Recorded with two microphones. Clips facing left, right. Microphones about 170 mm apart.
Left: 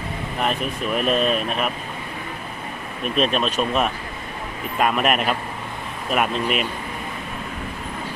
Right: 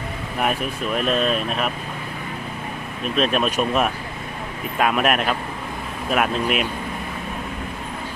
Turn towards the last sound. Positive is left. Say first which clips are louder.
# right 1 dB
turn(degrees=0)  # may be behind; listen again after turning